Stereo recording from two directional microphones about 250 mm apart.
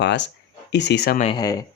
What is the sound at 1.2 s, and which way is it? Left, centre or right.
Speech, centre.